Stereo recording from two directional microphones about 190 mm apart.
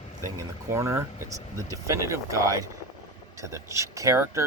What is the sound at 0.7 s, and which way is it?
Speech, 15° right (ahead or behind).